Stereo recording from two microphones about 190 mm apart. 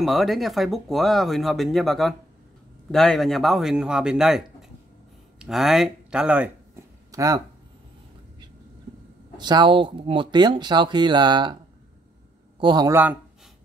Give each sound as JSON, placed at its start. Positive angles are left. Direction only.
{"t": 0.0, "sound": "speech", "side_deg": 0}
{"t": 5.4, "sound": "a sound", "side_deg": 0}
{"t": 9.4, "sound": "speech", "side_deg": -25}
{"t": 12.5, "sound": "speech", "side_deg": -25}
{"t": 12.9, "sound": "speech", "side_deg": -10}